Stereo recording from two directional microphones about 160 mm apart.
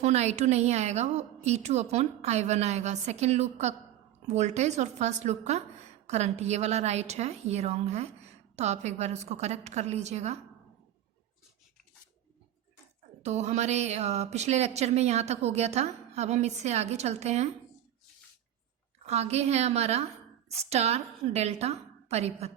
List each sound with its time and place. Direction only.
0.0 s a woman's voice: 45° right (ahead or behind)
13.2 s a woman's voice: 45° right (ahead or behind)
19.0 s a woman's voice: 40° right (ahead or behind)